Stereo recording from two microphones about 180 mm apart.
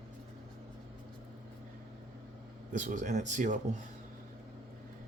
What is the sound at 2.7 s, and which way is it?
Speech, 45° right (ahead or behind).